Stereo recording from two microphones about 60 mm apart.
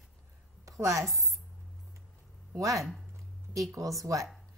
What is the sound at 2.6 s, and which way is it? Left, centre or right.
A woman's voice, right.